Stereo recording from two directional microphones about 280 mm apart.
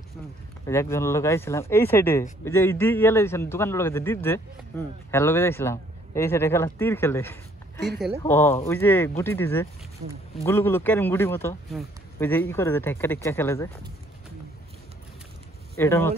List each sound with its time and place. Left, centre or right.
0.7 s a man's voice: centre
10.0 s speech: right
10.4 s a man's voice: centre
15.8 s a man's voice: centre